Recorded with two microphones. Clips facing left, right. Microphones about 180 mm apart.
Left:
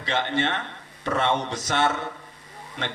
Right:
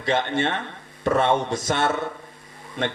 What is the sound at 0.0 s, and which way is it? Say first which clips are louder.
A man's voice: right 3 dB; 50° right (ahead or behind).